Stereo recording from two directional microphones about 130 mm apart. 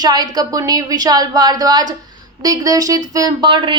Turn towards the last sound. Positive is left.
turn(degrees=-40)  # may be behind; listen again after turning